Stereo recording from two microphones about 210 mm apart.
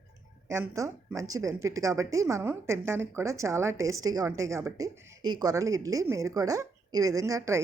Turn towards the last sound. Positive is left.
turn(degrees=-15)  # may be behind; listen again after turning